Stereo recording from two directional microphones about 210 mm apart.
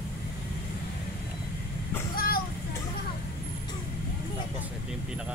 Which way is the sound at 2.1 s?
45° left (ahead or behind).